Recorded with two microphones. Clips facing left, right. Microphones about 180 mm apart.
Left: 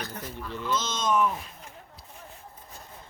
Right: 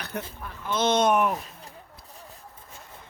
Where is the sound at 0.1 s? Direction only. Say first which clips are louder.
Even; 65° right (ahead or behind).